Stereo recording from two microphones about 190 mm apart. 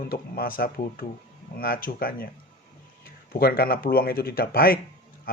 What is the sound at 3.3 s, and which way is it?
Speech, 55° left (ahead or behind).